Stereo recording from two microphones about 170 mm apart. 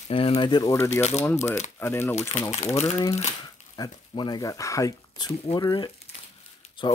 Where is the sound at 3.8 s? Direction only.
25° left (ahead or behind).